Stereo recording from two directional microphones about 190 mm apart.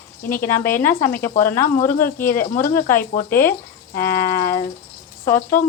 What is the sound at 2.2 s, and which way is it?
Speech, 45° left (ahead or behind).